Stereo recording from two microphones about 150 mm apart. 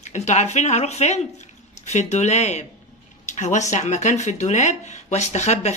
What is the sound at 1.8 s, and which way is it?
Speech, 50° left (ahead or behind).